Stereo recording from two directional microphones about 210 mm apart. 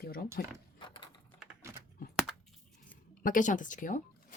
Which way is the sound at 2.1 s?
5° right (ahead or behind).